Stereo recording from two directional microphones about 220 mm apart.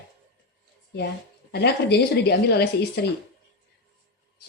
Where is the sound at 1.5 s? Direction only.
50° left (ahead or behind).